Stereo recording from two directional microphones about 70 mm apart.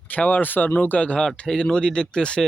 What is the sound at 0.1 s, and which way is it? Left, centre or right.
Speech, left.